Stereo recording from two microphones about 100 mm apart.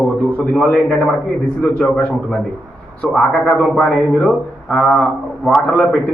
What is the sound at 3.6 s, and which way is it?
A man's voice, 10° left (ahead or behind).